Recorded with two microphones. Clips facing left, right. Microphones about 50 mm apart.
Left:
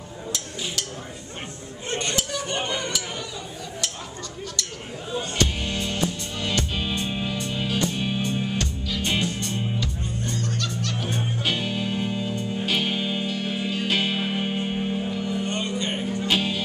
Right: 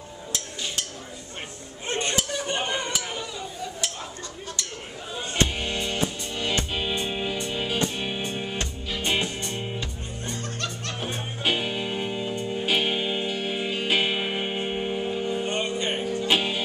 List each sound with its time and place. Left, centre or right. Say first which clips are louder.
1.9 s a sound: even; centre
5.6 s music: even; centre
8.5 s music: left 3 dB; right
9.0 s music: even; centre
11.1 s music: right 1 dB; centre